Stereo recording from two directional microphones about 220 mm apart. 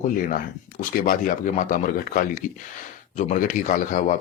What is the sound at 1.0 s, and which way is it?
A man's voice, 40° left (ahead or behind).